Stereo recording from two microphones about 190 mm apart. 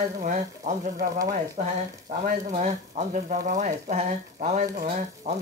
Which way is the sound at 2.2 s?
40° right (ahead or behind).